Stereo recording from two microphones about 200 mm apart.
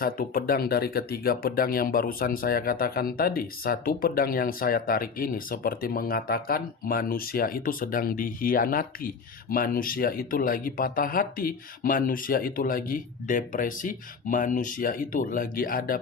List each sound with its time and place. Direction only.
0.0 s speech: 50° left (ahead or behind)